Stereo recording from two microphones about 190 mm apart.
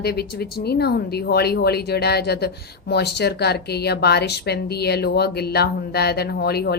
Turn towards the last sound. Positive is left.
turn(degrees=55)  # may be behind; listen again after turning